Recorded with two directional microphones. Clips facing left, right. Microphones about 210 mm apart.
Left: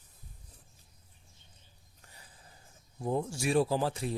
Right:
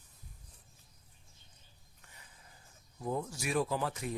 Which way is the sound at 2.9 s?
30° left (ahead or behind).